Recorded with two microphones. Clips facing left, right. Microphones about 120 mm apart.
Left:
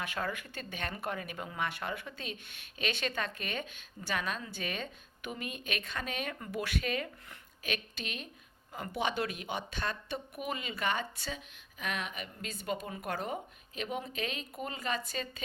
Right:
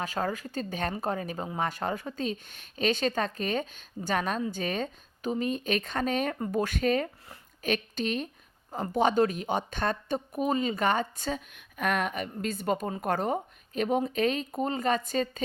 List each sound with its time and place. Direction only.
0.0 s speech: 35° right (ahead or behind)